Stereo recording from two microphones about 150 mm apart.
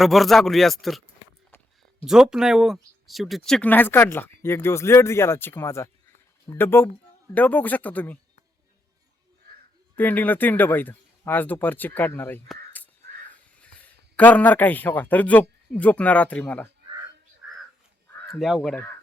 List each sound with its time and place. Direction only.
0.0 s speech: centre (ahead or behind)
2.0 s speech: 5° right (ahead or behind)
10.0 s speech: 10° left (ahead or behind)
12.8 s crow: 10° left (ahead or behind)
13.3 s speech: 10° left (ahead or behind)
18.3 s speech: centre (ahead or behind)